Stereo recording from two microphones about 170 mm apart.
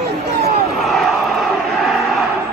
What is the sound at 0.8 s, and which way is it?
Crowd, centre (ahead or behind).